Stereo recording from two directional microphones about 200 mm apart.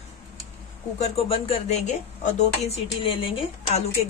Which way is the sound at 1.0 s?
30° left (ahead or behind).